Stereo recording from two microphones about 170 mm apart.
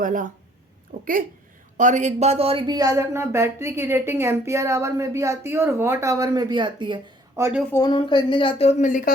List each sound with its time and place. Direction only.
0.0 s speech: 50° right (ahead or behind); by 7.4 s 25° right (ahead or behind)
7.7 s speech: 25° left (ahead or behind); by 9.1 s 50° left (ahead or behind)